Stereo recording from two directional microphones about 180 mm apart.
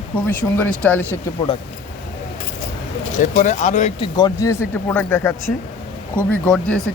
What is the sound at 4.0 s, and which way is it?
Speech, 20° left (ahead or behind).